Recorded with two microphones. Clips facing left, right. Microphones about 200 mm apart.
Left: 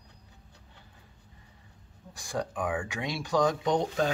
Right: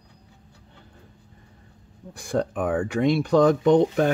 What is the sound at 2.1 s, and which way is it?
Speech, 55° right (ahead or behind).